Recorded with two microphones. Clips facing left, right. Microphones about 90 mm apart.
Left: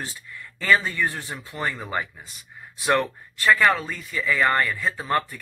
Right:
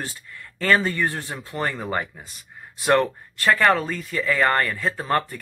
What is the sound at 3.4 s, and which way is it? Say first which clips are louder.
Speech: right 1 dB; 45° right (ahead or behind).